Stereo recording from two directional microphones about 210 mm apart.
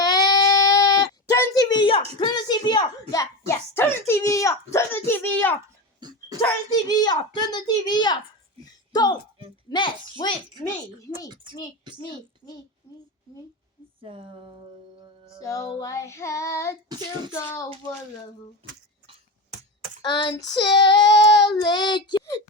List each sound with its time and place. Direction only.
0.0 s a sound: 20° left (ahead or behind)
2.1 s a child's voice: 20° left (ahead or behind)
6.0 s dog: 20° right (ahead or behind)
6.7 s a child's voice: 15° left (ahead or behind)
14.0 s a sound: 25° right (ahead or behind)
15.4 s a child's voice: 15° left (ahead or behind)
16.9 s child singing: 20° right (ahead or behind)
18.6 s child singing: 25° right (ahead or behind)
20.0 s a child's voice: 20° left (ahead or behind)